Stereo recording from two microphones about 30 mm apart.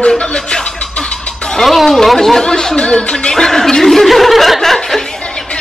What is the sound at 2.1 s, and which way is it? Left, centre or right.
Speech, centre.